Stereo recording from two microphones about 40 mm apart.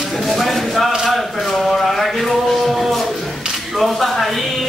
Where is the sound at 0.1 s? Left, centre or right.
Centre.